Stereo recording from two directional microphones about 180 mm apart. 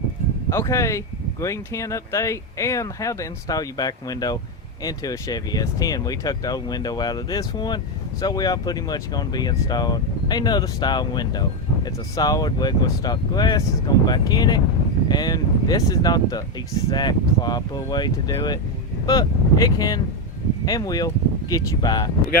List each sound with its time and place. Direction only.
0.5 s speech: 15° left (ahead or behind)